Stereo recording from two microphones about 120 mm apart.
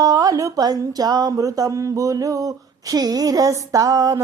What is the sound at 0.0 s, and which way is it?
Speech, 30° right (ahead or behind).